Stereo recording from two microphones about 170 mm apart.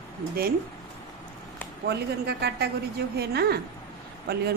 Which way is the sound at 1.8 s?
70° right (ahead or behind).